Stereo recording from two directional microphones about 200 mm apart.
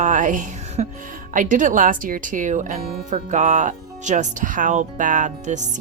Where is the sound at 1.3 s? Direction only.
40° right (ahead or behind).